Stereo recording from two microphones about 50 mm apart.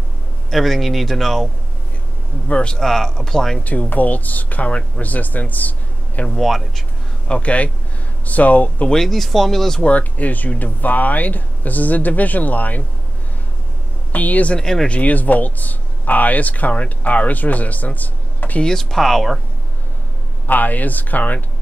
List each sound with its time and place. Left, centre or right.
0.5 s speech: centre
2.4 s speech: left
2.7 s speech: centre
3.6 s speech: left
4.6 s speech: left
6.2 s speech: centre
7.2 s speech: left
8.9 s speech: centre
9.8 s speech: left
14.1 s speech: left
14.6 s speech: centre
14.9 s speech: left
18.6 s speech: centre
20.4 s speech: left